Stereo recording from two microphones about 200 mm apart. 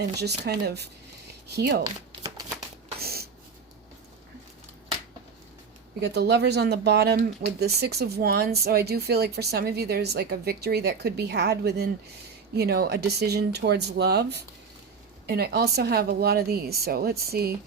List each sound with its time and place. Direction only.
0.2 s speech: 55° right (ahead or behind)
3.0 s a sound: 50° right (ahead or behind)
6.0 s speech: 55° right (ahead or behind)